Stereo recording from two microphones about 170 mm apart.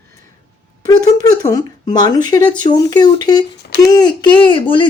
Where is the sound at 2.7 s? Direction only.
25° left (ahead or behind).